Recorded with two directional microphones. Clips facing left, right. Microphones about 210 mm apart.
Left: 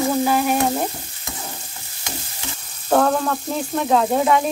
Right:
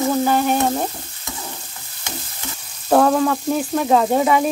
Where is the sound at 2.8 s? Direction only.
5° right (ahead or behind).